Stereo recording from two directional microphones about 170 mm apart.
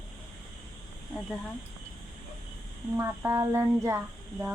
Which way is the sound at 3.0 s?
15° right (ahead or behind).